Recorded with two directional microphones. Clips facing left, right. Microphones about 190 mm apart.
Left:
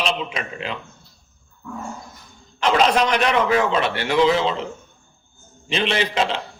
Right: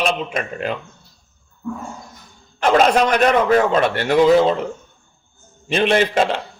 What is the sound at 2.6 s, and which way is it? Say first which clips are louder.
A man's voice: right 3 dB; 50° right (ahead or behind).